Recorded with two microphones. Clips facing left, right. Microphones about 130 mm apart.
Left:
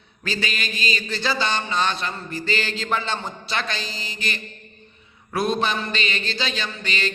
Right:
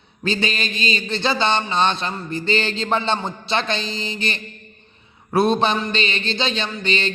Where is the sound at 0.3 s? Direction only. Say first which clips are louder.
Right 5 dB; 25° right (ahead or behind).